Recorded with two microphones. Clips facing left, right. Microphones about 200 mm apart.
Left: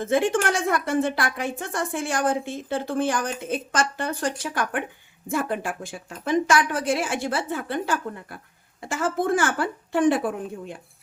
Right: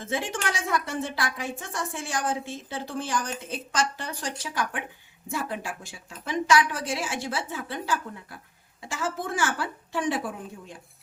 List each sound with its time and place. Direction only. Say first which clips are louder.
0.0 s a woman's voice: left 9 dB; 55° left (ahead or behind)